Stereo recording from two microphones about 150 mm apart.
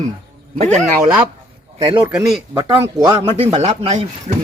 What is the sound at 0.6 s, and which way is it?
Speech, 50° right (ahead or behind).